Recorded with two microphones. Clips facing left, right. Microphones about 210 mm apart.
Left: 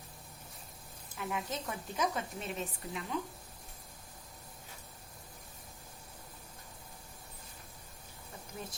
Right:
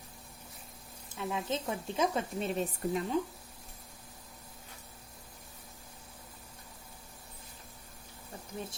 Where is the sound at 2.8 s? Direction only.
45° right (ahead or behind).